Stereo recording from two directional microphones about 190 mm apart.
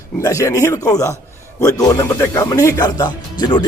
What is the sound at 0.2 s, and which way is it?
Speech, 15° left (ahead or behind).